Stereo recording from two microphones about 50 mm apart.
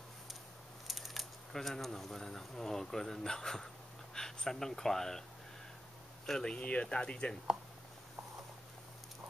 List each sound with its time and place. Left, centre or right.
0.8 s a sound: centre
1.5 s speech: centre
6.2 s speech: centre
6.5 s speech: left